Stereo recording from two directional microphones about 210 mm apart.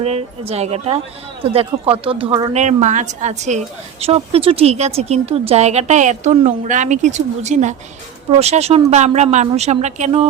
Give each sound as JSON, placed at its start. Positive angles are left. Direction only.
{"t": 0.0, "sound": "a woman's voice", "side_deg": -30}